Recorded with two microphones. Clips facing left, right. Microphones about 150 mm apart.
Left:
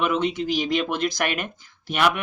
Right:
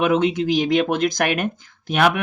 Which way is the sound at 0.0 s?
55° right (ahead or behind).